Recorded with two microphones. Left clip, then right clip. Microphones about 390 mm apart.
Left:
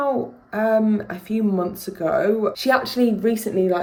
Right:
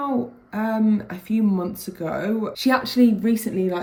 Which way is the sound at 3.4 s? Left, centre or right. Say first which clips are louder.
Left 4 dB; left.